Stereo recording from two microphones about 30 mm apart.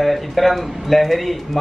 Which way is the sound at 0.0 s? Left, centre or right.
Centre.